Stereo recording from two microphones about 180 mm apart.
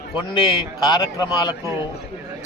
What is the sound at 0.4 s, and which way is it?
Speech, 25° left (ahead or behind).